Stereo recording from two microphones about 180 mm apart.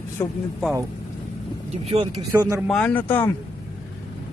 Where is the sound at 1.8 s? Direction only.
30° right (ahead or behind).